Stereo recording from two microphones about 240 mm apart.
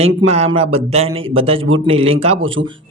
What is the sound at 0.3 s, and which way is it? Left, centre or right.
Speech, right.